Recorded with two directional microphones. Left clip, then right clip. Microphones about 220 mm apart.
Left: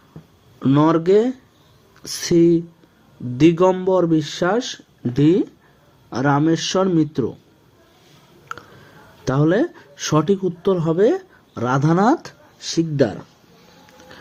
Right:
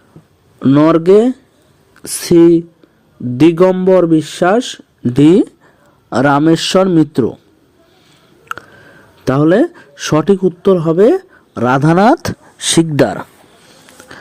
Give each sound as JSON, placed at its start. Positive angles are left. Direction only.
{"t": 0.6, "sound": "speech", "side_deg": -20}
{"t": 8.4, "sound": "speech", "side_deg": -30}
{"t": 14.1, "sound": "music", "side_deg": -35}